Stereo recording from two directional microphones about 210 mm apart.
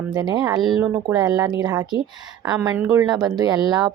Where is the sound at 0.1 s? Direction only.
20° right (ahead or behind).